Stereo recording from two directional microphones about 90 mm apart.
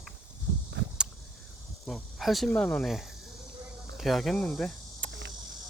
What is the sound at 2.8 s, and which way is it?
Cricket, 5° right (ahead or behind).